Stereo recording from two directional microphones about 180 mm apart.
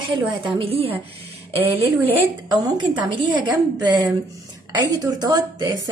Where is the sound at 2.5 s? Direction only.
25° right (ahead or behind).